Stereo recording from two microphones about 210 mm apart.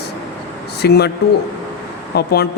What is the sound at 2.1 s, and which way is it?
Speech, 50° left (ahead or behind).